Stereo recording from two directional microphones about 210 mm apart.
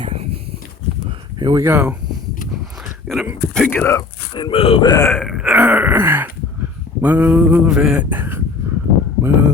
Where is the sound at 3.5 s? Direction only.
5° left (ahead or behind).